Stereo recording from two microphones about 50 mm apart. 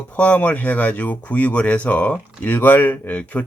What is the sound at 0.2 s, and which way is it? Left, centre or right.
Speech, left.